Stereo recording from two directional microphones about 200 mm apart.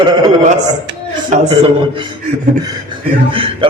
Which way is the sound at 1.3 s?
35° right (ahead or behind).